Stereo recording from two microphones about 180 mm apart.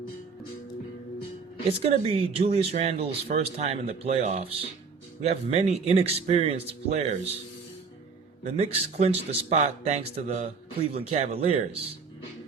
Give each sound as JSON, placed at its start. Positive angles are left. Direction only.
{"t": 1.8, "sound": "speech", "side_deg": -35}
{"t": 8.4, "sound": "speech", "side_deg": -35}